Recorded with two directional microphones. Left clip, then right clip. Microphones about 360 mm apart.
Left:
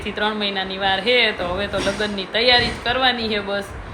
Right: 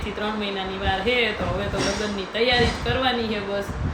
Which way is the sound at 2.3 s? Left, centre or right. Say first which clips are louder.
Left 4 dB; centre.